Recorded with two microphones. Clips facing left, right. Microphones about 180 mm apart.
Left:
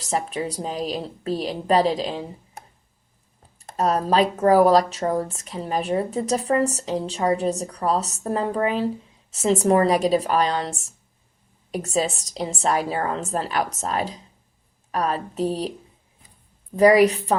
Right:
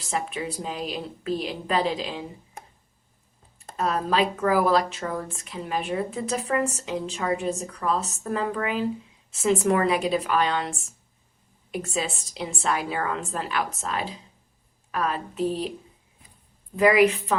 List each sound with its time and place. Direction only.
0.0 s a woman's voice: 40° left (ahead or behind)
3.8 s a woman's voice: 40° left (ahead or behind)
16.7 s a woman's voice: 40° left (ahead or behind)